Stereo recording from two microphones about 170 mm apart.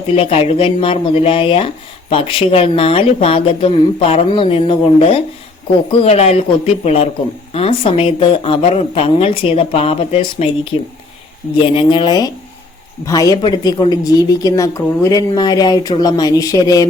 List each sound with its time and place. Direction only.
0.1 s a woman's voice: 35° left (ahead or behind)